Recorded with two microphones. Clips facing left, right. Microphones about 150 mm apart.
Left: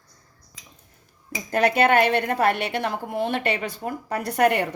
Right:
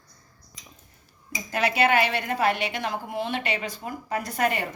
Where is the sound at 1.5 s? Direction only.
50° left (ahead or behind).